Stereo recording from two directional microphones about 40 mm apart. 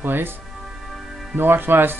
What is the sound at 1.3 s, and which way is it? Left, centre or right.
Speech, right.